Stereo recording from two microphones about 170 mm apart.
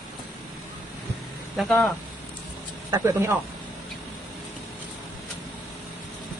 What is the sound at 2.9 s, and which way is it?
Speech, 15° right (ahead or behind).